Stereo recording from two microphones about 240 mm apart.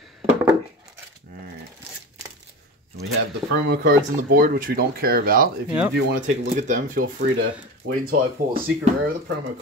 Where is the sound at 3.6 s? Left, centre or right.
Right.